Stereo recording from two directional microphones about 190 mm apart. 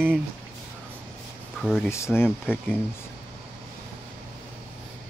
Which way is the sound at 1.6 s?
Centre (ahead or behind).